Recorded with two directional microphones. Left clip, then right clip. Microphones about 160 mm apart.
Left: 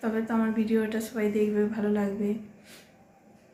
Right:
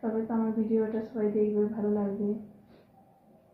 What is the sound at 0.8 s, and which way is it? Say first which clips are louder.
A woman's voice: left 1 dB; 30° left (ahead or behind).